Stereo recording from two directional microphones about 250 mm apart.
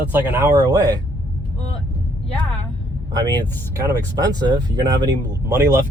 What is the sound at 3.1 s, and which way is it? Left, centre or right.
Speech, centre.